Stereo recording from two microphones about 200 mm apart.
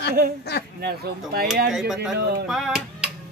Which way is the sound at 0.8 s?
50° right (ahead or behind).